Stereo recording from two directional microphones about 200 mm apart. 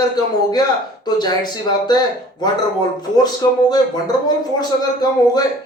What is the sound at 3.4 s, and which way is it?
Speech, 15° left (ahead or behind).